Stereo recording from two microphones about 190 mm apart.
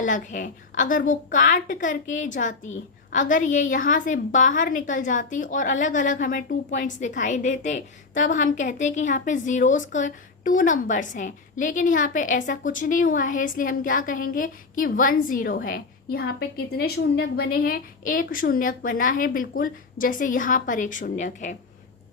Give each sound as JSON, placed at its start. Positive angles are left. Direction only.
{"t": 0.0, "sound": "a woman's voice", "side_deg": 40}